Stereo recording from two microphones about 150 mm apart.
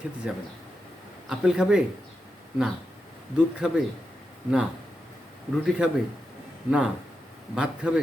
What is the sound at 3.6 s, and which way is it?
Speech, 5° right (ahead or behind).